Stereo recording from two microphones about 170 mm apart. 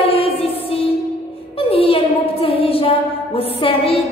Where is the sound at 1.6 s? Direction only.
35° left (ahead or behind).